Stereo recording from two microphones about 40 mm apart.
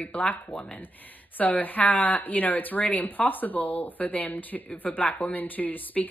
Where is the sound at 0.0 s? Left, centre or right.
Left.